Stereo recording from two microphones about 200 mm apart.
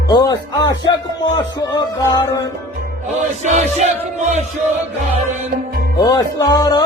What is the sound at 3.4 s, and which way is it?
Music, 35° right (ahead or behind).